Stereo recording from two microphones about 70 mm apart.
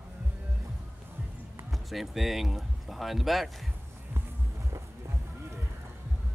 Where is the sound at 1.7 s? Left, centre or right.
Centre.